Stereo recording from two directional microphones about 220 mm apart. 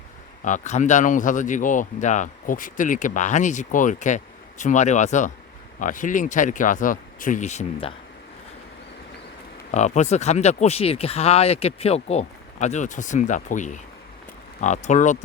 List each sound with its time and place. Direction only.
0.4 s speech: 35° left (ahead or behind)
9.7 s speech: 30° left (ahead or behind)